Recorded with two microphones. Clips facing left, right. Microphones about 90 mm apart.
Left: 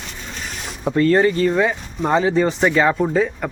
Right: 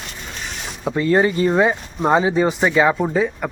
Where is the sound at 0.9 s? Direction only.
10° right (ahead or behind).